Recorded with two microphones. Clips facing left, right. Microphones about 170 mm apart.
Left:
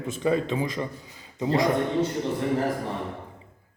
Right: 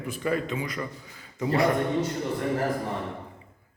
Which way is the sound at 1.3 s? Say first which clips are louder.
Even; 20° left (ahead or behind).